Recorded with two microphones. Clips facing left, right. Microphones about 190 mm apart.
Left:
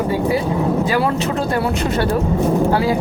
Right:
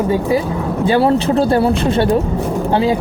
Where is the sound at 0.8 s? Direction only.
30° right (ahead or behind).